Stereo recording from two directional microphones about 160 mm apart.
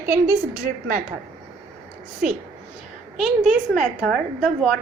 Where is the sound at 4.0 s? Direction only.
Centre (ahead or behind).